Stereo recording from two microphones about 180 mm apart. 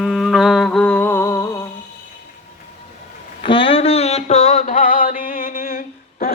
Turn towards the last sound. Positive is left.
turn(degrees=55)  # may be behind; listen again after turning